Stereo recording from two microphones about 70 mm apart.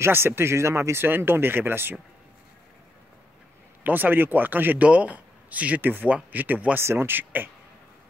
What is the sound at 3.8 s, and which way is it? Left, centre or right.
A man's voice, right.